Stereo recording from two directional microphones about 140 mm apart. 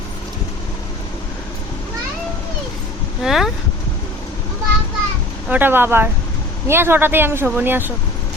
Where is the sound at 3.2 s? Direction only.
Centre (ahead or behind).